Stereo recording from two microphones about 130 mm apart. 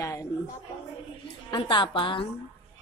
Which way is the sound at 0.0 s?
25° left (ahead or behind).